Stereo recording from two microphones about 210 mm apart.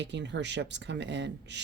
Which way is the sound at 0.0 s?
55° right (ahead or behind).